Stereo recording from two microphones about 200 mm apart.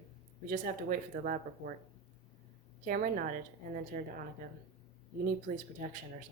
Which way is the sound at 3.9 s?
40° right (ahead or behind).